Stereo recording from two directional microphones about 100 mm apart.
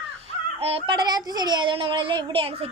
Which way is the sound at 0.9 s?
45° right (ahead or behind).